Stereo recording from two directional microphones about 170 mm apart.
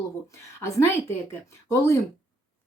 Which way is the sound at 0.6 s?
15° left (ahead or behind).